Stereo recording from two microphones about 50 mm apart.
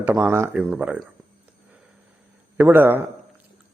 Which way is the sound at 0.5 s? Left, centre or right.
Right.